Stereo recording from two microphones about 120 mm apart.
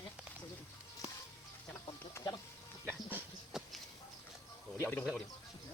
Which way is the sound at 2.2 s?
30° left (ahead or behind).